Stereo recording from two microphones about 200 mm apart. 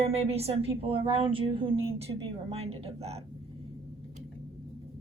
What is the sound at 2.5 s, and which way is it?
Speech, 30° right (ahead or behind).